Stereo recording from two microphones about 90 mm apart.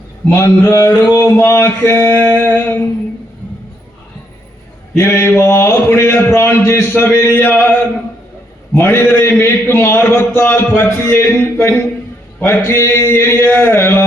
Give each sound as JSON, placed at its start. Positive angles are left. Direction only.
{"t": 0.3, "sound": "mantra", "side_deg": 35}
{"t": 4.9, "sound": "mantra", "side_deg": 30}
{"t": 8.7, "sound": "a man's voice", "side_deg": 25}
{"t": 12.4, "sound": "mantra", "side_deg": 25}